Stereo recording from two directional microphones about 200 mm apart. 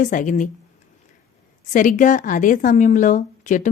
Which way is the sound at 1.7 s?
40° left (ahead or behind).